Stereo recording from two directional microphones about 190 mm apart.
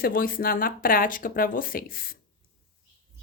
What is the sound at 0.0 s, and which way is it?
A woman's voice, 50° left (ahead or behind).